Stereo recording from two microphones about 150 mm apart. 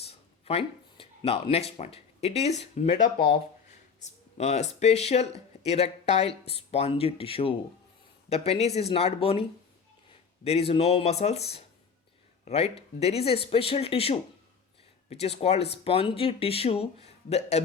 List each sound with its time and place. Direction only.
0.0 s speech: 40° left (ahead or behind)